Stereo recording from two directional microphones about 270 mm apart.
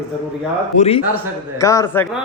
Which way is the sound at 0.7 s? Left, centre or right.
Left.